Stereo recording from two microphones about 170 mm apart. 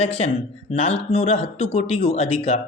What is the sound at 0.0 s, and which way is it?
Speech, 35° left (ahead or behind).